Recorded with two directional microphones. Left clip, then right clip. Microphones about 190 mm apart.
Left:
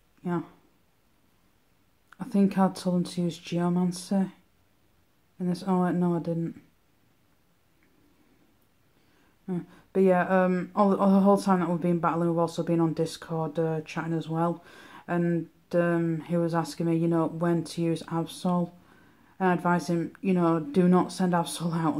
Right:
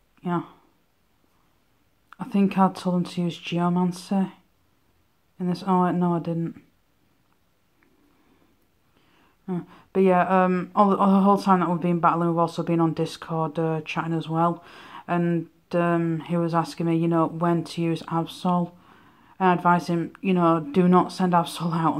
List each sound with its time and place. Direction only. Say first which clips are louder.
0.2 s speech: right 4 dB; 15° right (ahead or behind)
2.0 s speech: right 2 dB; 15° right (ahead or behind)
5.4 s speech: right 6 dB; 15° right (ahead or behind)
9.5 s speech: right 3 dB; 15° right (ahead or behind)